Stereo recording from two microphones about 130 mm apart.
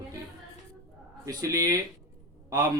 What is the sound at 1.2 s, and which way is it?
A man's voice, 25° right (ahead or behind).